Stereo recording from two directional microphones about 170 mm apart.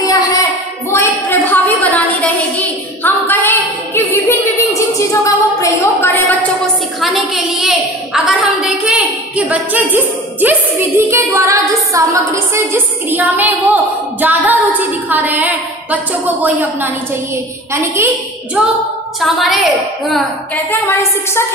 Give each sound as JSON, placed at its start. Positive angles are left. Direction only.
{"t": 0.0, "sound": "child singing", "side_deg": 20}
{"t": 1.5, "sound": "a sound", "side_deg": 10}
{"t": 7.0, "sound": "a woman's voice", "side_deg": 0}
{"t": 19.1, "sound": "a woman's voice", "side_deg": 0}
{"t": 20.1, "sound": "a woman's voice", "side_deg": 10}